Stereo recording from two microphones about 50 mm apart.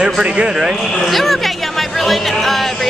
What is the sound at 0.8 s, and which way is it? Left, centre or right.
Speech, centre.